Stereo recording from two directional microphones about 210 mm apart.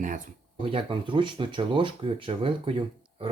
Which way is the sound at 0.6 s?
25° right (ahead or behind).